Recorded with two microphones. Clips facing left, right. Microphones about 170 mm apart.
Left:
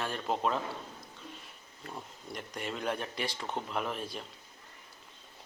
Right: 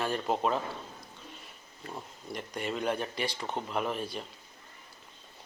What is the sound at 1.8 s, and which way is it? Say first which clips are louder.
Speech: right 2 dB; centre (ahead or behind).